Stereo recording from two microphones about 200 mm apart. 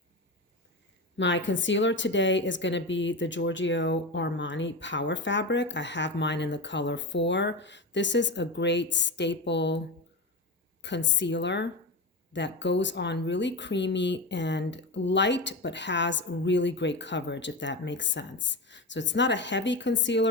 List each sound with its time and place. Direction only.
1.1 s speech: 65° left (ahead or behind)